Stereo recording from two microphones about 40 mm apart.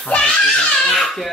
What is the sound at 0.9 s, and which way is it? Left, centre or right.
Baby cry, centre.